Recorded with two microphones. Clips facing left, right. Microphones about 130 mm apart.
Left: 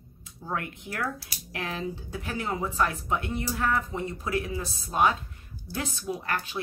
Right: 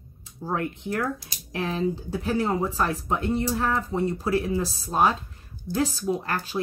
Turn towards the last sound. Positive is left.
turn(degrees=-35)  # may be behind; listen again after turning